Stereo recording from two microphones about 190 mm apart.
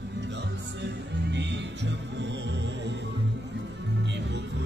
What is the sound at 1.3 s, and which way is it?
Music, 65° right (ahead or behind).